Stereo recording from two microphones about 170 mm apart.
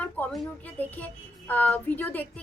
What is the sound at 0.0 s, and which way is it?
Speech, 10° left (ahead or behind).